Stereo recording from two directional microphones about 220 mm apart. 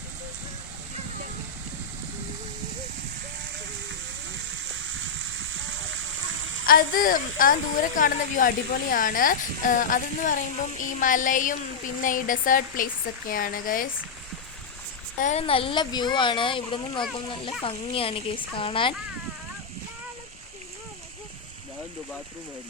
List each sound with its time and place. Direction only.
4.9 s a sound: 60° right (ahead or behind)
6.7 s speech: 40° left (ahead or behind)
15.2 s speech: 30° left (ahead or behind)